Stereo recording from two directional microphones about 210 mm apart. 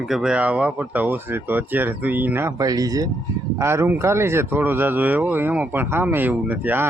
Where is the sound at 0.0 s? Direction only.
Centre (ahead or behind).